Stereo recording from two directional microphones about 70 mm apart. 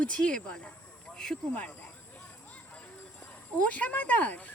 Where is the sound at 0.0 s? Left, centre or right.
Centre.